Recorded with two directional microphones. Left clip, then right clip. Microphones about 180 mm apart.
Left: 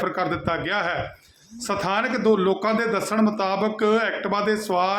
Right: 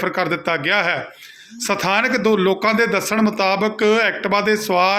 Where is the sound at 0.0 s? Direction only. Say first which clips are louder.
Right 4 dB; 15° right (ahead or behind).